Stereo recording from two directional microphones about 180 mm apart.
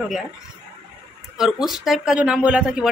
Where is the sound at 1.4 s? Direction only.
Centre (ahead or behind).